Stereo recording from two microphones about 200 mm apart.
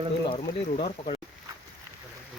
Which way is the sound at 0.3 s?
30° left (ahead or behind).